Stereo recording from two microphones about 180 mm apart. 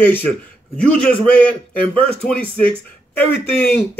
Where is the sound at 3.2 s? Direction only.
10° left (ahead or behind).